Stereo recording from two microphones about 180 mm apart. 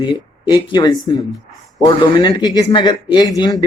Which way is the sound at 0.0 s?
25° left (ahead or behind).